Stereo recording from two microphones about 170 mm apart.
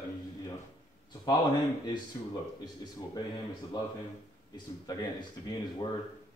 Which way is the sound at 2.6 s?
25° left (ahead or behind).